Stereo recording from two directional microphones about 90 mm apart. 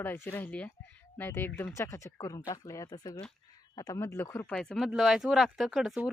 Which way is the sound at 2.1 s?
50° left (ahead or behind).